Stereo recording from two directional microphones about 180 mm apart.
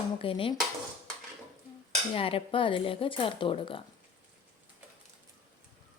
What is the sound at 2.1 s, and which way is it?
Speech, 30° left (ahead or behind).